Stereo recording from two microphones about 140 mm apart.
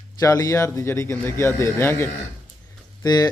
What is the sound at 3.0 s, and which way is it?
Speech, 30° left (ahead or behind).